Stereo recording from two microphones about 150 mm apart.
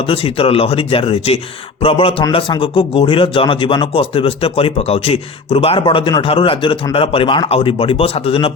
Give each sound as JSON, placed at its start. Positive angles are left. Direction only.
{"t": 0.1, "sound": "speech", "side_deg": 40}